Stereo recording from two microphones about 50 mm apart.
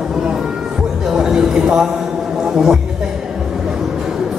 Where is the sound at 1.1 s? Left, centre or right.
Centre.